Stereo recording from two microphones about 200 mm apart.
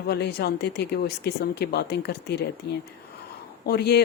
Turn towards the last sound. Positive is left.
turn(degrees=55)  # may be behind; listen again after turning